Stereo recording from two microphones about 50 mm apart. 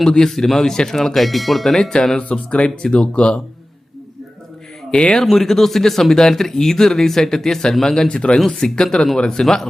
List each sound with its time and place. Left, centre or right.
0.1 s speech: centre
4.9 s speech: centre
5.2 s speech: centre
8.4 s speech: centre